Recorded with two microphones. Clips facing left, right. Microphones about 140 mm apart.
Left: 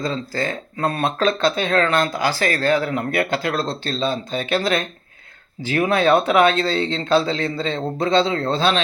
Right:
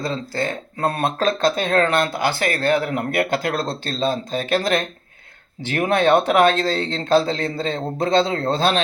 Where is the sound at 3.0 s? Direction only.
45° right (ahead or behind).